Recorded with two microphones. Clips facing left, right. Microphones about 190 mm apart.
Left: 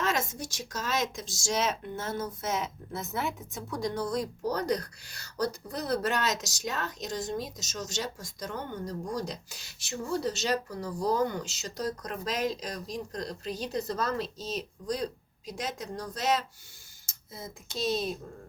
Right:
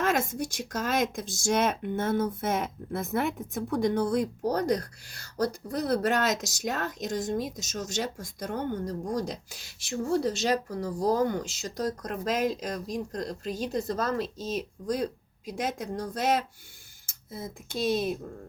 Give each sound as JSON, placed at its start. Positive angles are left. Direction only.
{"t": 0.0, "sound": "speech", "side_deg": -55}